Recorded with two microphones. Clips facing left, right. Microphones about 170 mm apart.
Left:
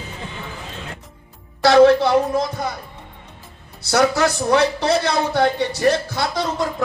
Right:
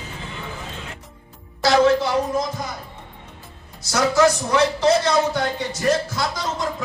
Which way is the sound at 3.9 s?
65° left (ahead or behind).